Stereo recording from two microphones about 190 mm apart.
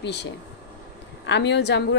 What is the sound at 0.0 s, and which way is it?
A woman's voice, 65° left (ahead or behind).